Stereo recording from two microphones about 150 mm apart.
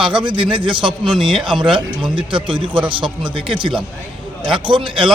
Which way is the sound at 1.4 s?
35° right (ahead or behind).